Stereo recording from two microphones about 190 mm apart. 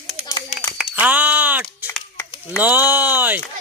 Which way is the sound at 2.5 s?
10° right (ahead or behind).